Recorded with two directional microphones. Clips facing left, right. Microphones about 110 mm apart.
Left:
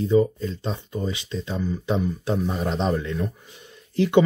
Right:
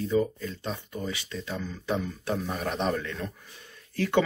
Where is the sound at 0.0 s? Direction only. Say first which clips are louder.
Left 6 dB; 25° left (ahead or behind).